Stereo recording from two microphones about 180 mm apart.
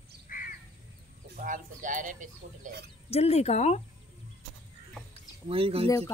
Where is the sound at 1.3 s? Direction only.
45° right (ahead or behind).